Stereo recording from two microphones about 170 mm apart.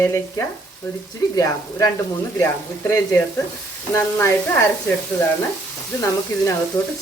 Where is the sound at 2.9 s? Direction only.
15° left (ahead or behind).